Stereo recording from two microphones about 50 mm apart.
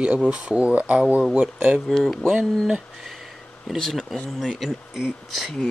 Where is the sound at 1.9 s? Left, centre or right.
Centre.